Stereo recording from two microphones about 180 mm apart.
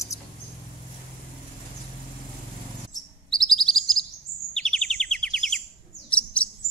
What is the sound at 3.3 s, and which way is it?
Chirp, centre (ahead or behind).